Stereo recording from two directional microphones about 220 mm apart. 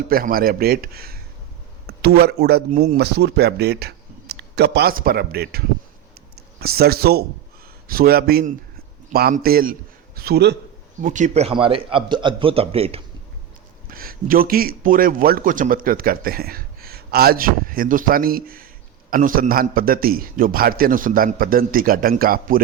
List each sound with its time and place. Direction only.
0.1 s a man's voice: 40° right (ahead or behind)
11.0 s speech: 35° right (ahead or behind)
13.8 s a man's voice: 40° right (ahead or behind)